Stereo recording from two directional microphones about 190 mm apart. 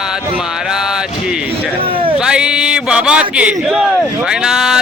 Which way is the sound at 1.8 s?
30° right (ahead or behind).